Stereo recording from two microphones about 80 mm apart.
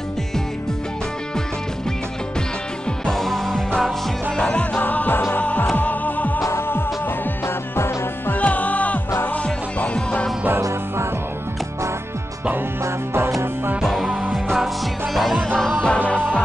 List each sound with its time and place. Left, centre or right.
3.1 s music: centre; by 6.4 s left
6.4 s music: left
8.4 s music: centre
12.8 s music: right
14.3 s music: centre
15.4 s music: centre